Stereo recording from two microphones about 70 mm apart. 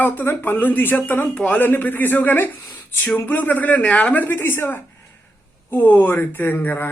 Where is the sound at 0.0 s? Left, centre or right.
Left.